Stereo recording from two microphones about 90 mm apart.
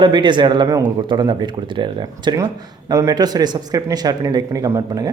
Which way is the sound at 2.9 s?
40° right (ahead or behind).